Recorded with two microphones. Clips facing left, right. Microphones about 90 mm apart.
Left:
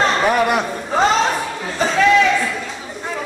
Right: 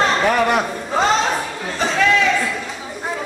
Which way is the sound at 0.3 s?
5° left (ahead or behind).